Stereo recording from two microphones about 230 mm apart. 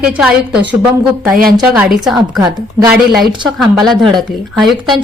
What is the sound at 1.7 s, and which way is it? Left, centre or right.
Speech, centre.